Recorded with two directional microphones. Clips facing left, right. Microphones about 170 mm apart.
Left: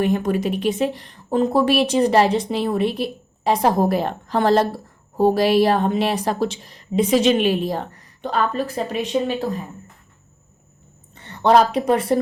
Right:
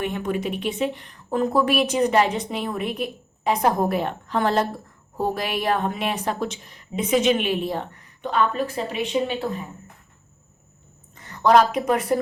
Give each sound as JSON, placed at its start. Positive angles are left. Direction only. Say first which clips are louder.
{"t": 0.0, "sound": "speech", "louder": "left 6 dB", "side_deg": 40}
{"t": 11.1, "sound": "a woman's voice", "louder": "left 1 dB", "side_deg": 30}